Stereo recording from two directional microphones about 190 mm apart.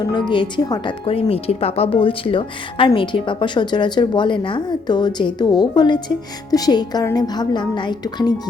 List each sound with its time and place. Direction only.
0.0 s speech: 25° left (ahead or behind)